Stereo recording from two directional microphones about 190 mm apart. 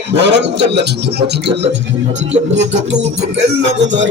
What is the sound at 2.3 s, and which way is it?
Music, 35° right (ahead or behind).